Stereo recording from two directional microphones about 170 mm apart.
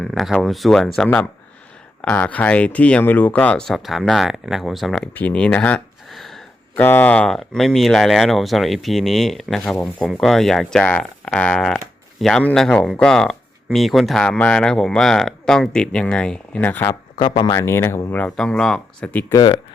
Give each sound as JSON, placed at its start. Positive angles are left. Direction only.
{"t": 0.0, "sound": "speech", "side_deg": 0}
{"t": 16.9, "sound": "speech", "side_deg": 25}
{"t": 19.3, "sound": "speech", "side_deg": 25}